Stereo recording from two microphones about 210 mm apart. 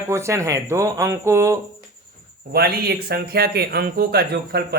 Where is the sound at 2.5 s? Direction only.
50° right (ahead or behind).